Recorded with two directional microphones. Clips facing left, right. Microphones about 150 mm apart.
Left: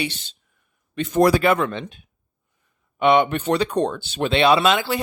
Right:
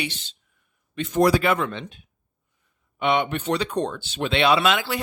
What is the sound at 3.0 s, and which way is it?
Speech, 45° left (ahead or behind).